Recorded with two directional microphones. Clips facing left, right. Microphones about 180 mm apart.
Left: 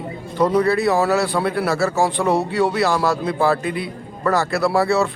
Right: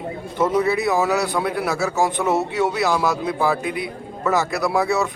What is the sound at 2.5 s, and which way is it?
Speech, centre (ahead or behind).